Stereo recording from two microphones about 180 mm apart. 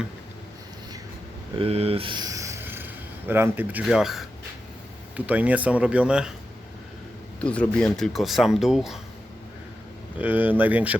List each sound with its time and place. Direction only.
1.5 s speech: 35° right (ahead or behind); by 6.3 s 5° right (ahead or behind)
7.4 s speech: 5° left (ahead or behind)
10.2 s speech: 10° right (ahead or behind)